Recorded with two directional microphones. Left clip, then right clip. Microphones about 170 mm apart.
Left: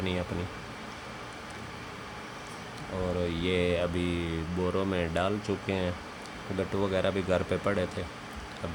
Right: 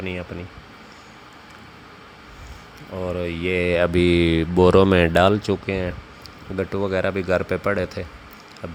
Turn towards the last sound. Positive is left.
turn(degrees=-35)  # may be behind; listen again after turning